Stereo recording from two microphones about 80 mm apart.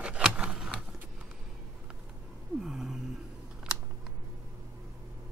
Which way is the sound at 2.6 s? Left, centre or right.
Centre.